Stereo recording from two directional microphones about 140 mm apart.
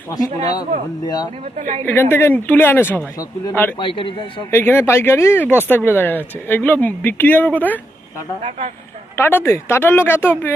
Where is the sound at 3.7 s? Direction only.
35° left (ahead or behind).